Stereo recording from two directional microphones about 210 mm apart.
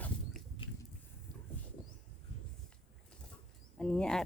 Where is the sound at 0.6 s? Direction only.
25° left (ahead or behind).